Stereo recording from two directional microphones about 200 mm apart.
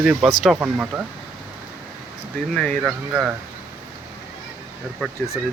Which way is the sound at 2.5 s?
5° left (ahead or behind).